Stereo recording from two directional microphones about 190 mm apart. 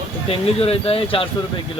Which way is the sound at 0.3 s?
30° left (ahead or behind).